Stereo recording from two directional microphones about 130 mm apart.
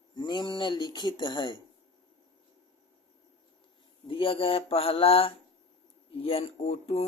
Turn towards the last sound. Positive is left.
turn(degrees=55)  # may be behind; listen again after turning